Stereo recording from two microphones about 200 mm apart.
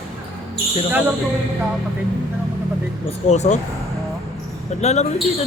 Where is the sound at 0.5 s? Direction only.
10° right (ahead or behind).